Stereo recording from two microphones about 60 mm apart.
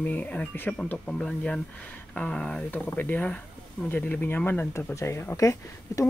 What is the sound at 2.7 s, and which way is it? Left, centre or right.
Speech, left.